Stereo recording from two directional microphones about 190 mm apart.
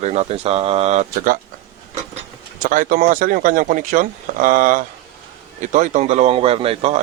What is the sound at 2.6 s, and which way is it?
Speech, 45° right (ahead or behind).